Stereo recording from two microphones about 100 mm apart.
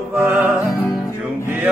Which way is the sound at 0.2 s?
20° right (ahead or behind).